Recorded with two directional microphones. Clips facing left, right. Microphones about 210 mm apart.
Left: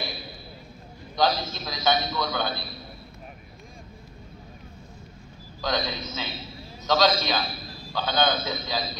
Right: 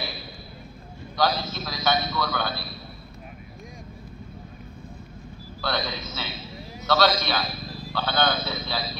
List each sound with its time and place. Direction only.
1.1 s a man's voice: 20° left (ahead or behind)
5.6 s a man's voice: 15° left (ahead or behind)